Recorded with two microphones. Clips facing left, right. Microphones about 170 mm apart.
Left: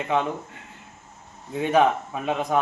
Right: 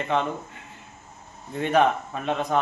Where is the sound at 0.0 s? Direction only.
5° left (ahead or behind).